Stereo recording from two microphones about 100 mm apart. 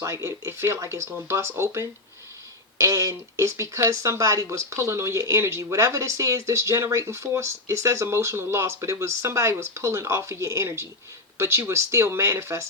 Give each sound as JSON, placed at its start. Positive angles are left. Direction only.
{"t": 0.0, "sound": "speech", "side_deg": -30}